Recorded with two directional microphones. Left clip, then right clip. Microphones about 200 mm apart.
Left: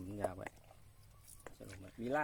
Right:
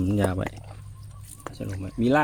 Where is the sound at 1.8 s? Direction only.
15° right (ahead or behind).